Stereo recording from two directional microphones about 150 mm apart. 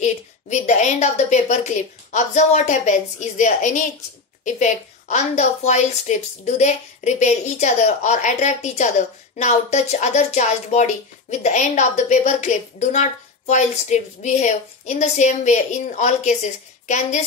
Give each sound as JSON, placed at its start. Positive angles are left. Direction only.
{"t": 0.0, "sound": "a woman's voice", "side_deg": 50}